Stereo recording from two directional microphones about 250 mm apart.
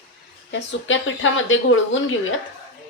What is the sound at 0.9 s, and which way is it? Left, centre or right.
A woman's voice, left.